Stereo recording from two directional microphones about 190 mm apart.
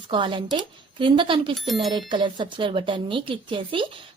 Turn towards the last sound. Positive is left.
turn(degrees=-25)  # may be behind; listen again after turning